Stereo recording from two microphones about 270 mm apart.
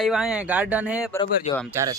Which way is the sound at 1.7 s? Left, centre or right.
Centre.